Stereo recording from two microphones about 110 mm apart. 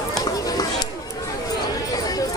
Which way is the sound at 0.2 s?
35° left (ahead or behind).